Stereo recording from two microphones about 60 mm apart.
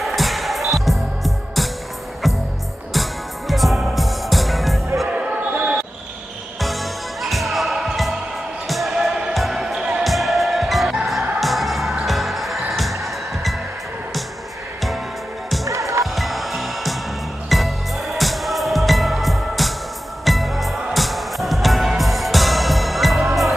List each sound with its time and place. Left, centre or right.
0.0 s music: centre
5.0 s basketball bounce: right
6.6 s music: centre
8.6 s basketball bounce: centre
9.3 s music: centre
10.0 s music: centre
15.6 s music: right
16.2 s music: centre